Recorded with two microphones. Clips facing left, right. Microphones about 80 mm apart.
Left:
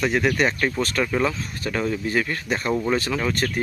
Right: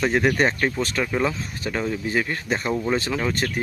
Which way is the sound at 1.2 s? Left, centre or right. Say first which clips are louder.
Even; centre.